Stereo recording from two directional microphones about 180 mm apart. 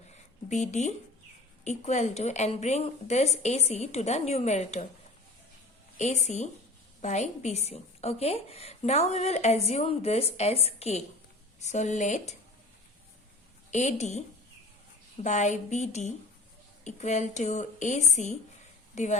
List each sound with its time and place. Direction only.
0.4 s a woman's voice: 40° left (ahead or behind)
6.0 s a woman's voice: 40° left (ahead or behind)
13.7 s a woman's voice: 40° left (ahead or behind)
15.2 s a woman's voice: 40° left (ahead or behind)